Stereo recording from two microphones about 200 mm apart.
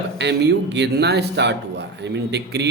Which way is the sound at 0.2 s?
60° right (ahead or behind).